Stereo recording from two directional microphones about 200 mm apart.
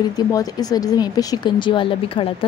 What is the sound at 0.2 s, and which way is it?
Speech, 20° left (ahead or behind).